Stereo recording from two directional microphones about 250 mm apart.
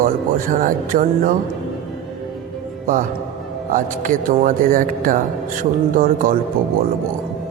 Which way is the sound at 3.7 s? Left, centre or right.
Right.